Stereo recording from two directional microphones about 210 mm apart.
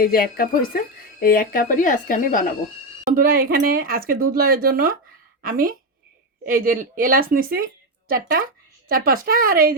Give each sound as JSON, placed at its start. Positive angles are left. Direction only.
{"t": 0.0, "sound": "speech", "side_deg": 45}
{"t": 3.1, "sound": "a woman's voice", "side_deg": -45}